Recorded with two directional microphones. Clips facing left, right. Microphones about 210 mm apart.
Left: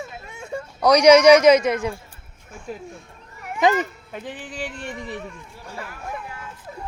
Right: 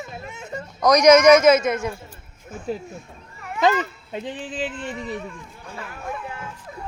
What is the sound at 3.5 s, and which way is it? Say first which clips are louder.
Speech: left 1 dB; 15° left (ahead or behind).